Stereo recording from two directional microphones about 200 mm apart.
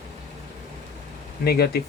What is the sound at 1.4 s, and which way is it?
Speech, 50° left (ahead or behind).